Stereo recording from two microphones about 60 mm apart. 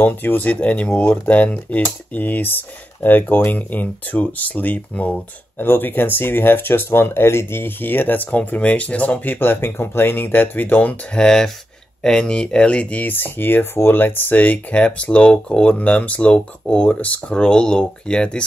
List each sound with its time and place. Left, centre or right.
0.0 s speech: left
11.1 s speech: centre